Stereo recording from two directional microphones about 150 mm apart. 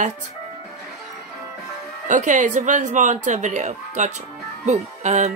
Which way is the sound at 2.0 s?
55° right (ahead or behind).